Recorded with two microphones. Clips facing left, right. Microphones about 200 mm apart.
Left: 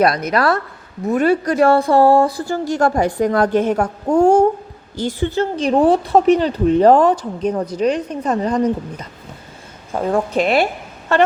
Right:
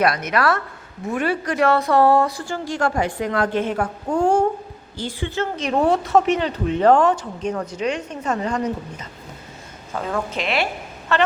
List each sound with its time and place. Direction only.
0.0 s a woman's voice: 35° left (ahead or behind)
10.3 s a woman's voice: 45° left (ahead or behind)